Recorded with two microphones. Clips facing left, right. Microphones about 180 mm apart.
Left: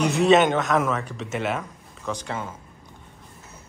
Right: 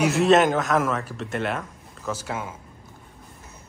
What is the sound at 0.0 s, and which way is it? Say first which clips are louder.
A man's voice: even; centre (ahead or behind).